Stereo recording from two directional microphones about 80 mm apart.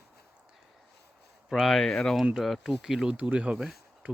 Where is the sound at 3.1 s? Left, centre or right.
Centre.